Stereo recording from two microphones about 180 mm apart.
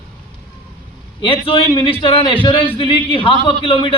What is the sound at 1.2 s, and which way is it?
A man's voice, 30° left (ahead or behind).